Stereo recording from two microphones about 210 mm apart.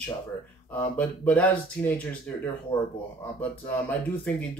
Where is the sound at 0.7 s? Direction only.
5° left (ahead or behind).